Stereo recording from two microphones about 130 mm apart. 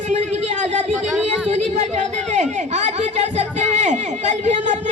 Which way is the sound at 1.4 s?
60° right (ahead or behind).